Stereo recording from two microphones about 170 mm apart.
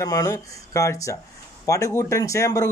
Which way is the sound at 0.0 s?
20° left (ahead or behind).